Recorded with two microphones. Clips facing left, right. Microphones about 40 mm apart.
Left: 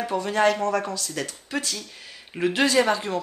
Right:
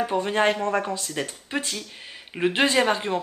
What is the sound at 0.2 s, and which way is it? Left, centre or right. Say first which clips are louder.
Speech: left 4 dB; right.